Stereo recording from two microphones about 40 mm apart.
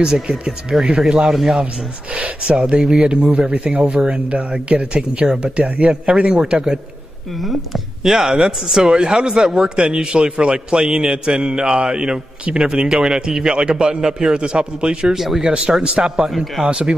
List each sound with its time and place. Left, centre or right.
0.0 s speech: centre
2.0 s speech: right
5.6 s speech: right; by 6.8 s centre
7.3 s speech: centre; by 15.1 s right
15.1 s speech: centre
15.4 s speech: right
16.3 s speech: centre
16.6 s speech: right